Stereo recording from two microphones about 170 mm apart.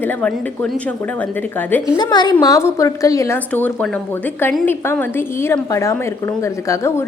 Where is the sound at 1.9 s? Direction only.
25° left (ahead or behind).